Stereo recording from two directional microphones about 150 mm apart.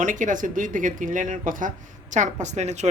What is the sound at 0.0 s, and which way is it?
Speech, 60° right (ahead or behind).